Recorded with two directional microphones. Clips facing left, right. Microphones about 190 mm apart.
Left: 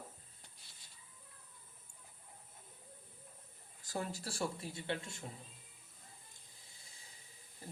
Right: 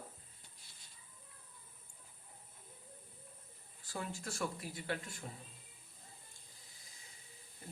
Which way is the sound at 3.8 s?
40° left (ahead or behind).